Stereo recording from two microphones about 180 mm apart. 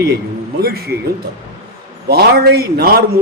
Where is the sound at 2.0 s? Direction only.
60° right (ahead or behind).